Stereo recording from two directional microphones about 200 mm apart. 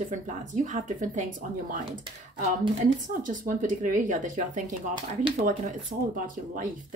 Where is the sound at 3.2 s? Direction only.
40° right (ahead or behind).